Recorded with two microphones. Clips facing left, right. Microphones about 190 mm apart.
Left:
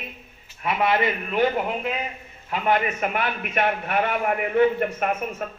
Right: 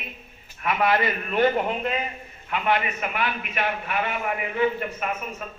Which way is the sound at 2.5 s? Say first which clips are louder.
Left 2 dB; 45° left (ahead or behind).